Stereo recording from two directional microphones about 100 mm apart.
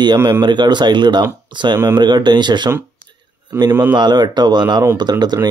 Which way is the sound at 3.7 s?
20° right (ahead or behind).